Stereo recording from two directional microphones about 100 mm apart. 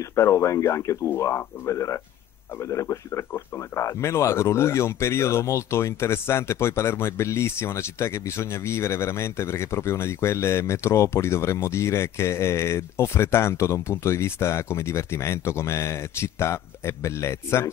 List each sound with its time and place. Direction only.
0.0 s speech: 30° left (ahead or behind)